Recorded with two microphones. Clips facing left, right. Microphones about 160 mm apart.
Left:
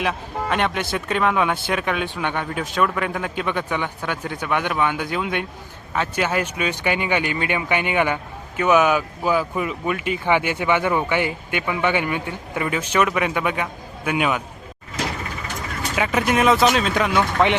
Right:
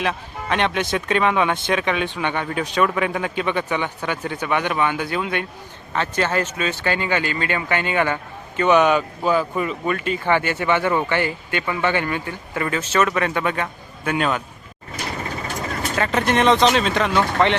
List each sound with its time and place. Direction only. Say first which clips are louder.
0.0 s speech: left 1 dB; 5° left (ahead or behind)
15.0 s mechanisms: left 4 dB; 90° left
16.0 s speech: even; 5° left (ahead or behind)